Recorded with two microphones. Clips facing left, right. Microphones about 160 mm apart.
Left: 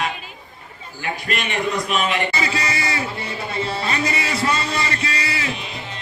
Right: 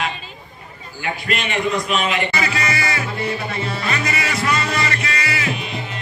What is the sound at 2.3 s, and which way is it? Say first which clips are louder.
Music: right 1 dB; 30° left (ahead or behind).